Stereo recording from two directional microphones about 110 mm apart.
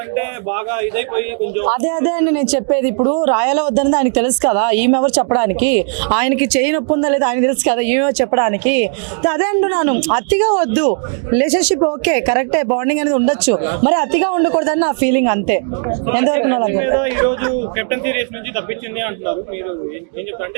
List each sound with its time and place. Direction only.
0.1 s speech: 15° right (ahead or behind)
3.2 s speech: 15° right (ahead or behind)